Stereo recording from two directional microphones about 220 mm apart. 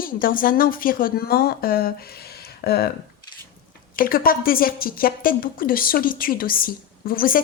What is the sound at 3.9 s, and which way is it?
A woman's voice, 40° left (ahead or behind).